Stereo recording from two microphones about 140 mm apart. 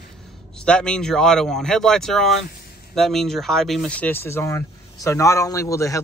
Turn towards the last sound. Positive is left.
turn(degrees=20)  # may be behind; listen again after turning